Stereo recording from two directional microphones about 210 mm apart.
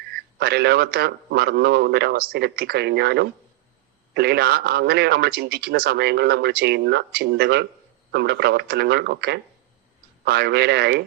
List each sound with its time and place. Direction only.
0.1 s speech: 50° right (ahead or behind)